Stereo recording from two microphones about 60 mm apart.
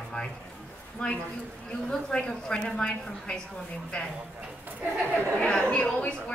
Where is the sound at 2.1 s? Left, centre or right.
Centre.